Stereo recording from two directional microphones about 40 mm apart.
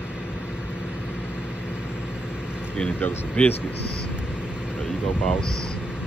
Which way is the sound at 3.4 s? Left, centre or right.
Left.